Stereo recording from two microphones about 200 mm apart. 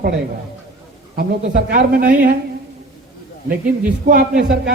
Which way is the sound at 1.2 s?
45° right (ahead or behind).